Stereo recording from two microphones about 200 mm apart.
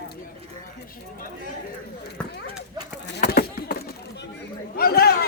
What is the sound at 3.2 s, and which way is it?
Chop, 50° left (ahead or behind).